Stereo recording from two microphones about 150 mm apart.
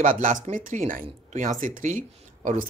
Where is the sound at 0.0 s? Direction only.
60° right (ahead or behind).